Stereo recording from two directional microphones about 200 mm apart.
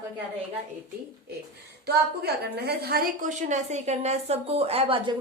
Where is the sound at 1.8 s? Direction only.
55° right (ahead or behind); by 5.1 s 30° right (ahead or behind).